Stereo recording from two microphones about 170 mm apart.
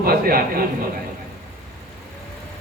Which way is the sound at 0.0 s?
60° right (ahead or behind).